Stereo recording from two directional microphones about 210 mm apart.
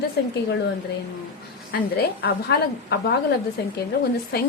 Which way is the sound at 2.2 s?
50° left (ahead or behind).